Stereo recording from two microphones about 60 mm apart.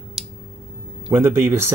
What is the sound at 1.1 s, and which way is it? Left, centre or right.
Speech, right.